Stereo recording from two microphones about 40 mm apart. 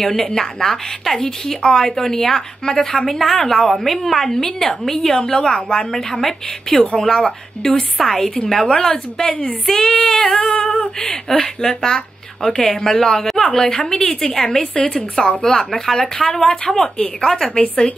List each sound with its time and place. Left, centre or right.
0.0 s a woman's voice: centre
8.0 s a woman's voice: centre
9.3 s speech: left
9.7 s a woman's voice: centre
10.5 s female singing: centre
11.2 s a woman's voice: centre